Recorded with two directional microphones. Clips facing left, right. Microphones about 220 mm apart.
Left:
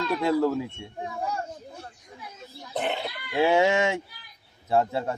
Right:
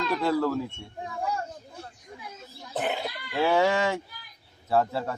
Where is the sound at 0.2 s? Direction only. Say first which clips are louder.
Left 3 dB; 15° left (ahead or behind).